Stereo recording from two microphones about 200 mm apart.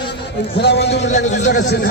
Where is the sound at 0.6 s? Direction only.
55° left (ahead or behind).